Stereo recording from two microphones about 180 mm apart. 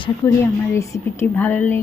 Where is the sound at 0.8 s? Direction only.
15° left (ahead or behind).